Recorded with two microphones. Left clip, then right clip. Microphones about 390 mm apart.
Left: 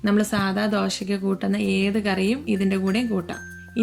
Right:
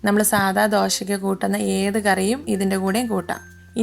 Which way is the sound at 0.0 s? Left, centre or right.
Centre.